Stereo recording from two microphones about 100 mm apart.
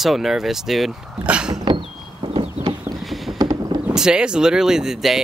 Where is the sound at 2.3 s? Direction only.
65° right (ahead or behind).